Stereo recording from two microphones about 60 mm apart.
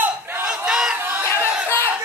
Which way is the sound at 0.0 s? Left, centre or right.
Right.